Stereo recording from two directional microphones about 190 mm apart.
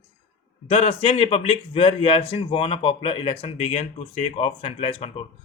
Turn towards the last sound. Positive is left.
turn(degrees=30)  # may be behind; listen again after turning